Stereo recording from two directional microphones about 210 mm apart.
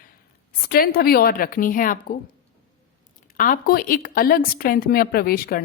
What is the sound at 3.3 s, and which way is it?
Speech, 40° left (ahead or behind).